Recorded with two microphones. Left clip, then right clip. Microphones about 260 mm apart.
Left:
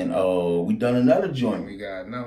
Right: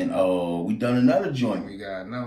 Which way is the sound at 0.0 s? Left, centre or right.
Centre.